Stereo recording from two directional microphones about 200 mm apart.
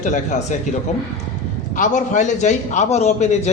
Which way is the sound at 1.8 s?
40° left (ahead or behind).